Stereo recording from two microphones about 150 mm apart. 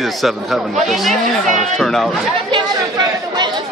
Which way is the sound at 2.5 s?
30° right (ahead or behind).